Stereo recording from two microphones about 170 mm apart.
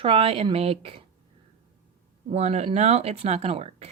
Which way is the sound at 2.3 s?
40° right (ahead or behind).